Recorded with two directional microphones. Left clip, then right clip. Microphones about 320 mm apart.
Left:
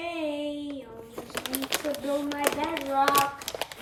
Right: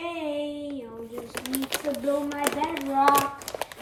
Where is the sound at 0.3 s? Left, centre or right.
Centre.